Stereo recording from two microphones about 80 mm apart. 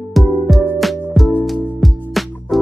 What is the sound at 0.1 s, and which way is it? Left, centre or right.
Music, centre.